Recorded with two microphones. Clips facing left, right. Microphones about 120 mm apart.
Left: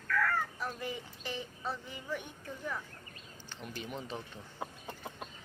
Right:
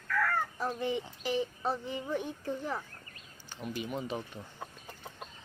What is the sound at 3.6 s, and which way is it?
Speech, 5° right (ahead or behind).